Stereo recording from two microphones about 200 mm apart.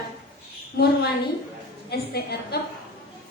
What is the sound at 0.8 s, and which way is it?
A woman's voice, 50° left (ahead or behind).